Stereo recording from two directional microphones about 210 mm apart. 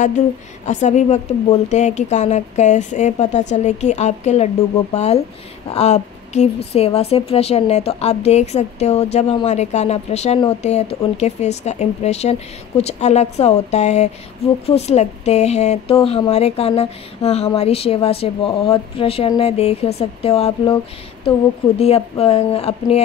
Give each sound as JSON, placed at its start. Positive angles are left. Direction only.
{"t": 0.7, "sound": "a woman's voice", "side_deg": 35}
{"t": 21.7, "sound": "a woman's voice", "side_deg": 30}